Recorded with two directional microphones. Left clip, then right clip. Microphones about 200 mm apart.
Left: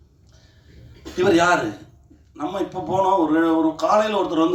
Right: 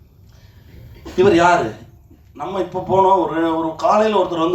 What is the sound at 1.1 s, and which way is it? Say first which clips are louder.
Speech: right 4 dB; 65° left (ahead or behind).